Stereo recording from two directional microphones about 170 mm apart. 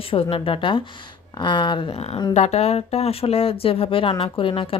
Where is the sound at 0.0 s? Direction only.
35° left (ahead or behind).